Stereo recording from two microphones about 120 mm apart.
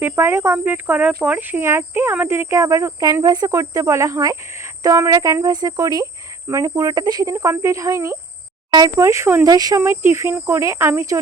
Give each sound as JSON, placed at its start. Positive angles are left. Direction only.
{"t": 0.0, "sound": "speech", "side_deg": -20}